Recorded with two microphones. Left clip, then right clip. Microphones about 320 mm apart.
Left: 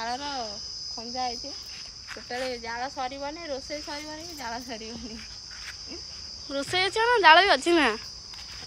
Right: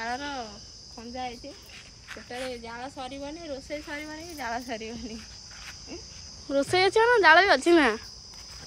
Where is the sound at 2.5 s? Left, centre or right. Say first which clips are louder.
Left 5 dB; left.